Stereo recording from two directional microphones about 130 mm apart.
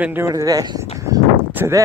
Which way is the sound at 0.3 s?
25° right (ahead or behind).